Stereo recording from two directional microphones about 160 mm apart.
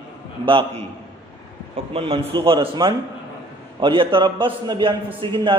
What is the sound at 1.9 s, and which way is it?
A man's voice, 35° right (ahead or behind).